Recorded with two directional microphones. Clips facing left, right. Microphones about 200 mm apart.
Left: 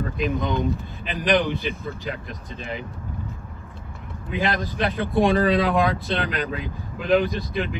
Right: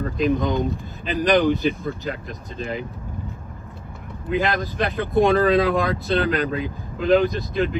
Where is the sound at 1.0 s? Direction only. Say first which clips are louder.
Right 4 dB; 40° right (ahead or behind).